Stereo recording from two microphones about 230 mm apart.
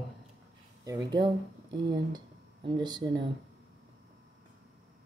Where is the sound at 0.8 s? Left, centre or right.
Centre.